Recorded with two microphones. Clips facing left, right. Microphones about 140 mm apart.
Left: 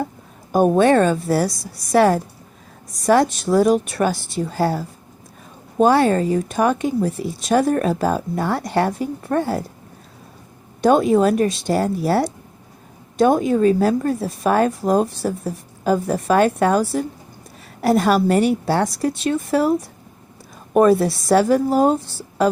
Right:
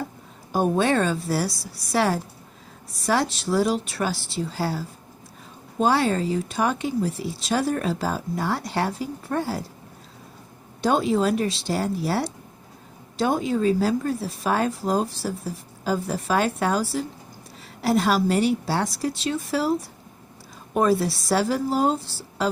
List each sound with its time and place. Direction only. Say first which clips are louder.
0.5 s speech: left 7 dB; 55° left (ahead or behind)
10.8 s speech: left 7 dB; 50° left (ahead or behind)
20.7 s speech: left 7 dB; 50° left (ahead or behind)